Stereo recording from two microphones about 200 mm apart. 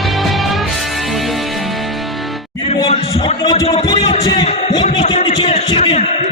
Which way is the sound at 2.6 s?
30° left (ahead or behind).